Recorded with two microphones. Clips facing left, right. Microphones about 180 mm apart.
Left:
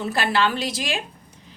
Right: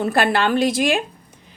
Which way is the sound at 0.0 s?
55° right (ahead or behind).